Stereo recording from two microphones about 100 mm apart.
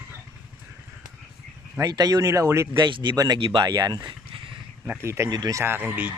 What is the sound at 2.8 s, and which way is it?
Speech, 50° right (ahead or behind).